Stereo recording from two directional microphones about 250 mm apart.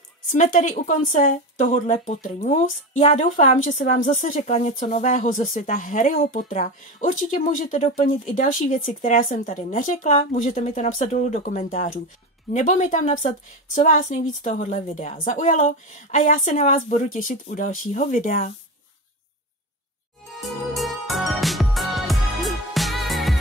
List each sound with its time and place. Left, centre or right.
0.3 s speech: left
20.4 s music: centre